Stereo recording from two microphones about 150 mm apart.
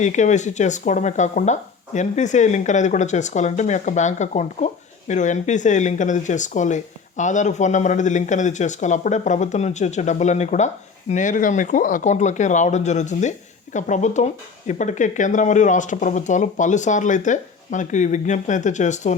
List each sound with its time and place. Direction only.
0.0 s speech: 55° left (ahead or behind)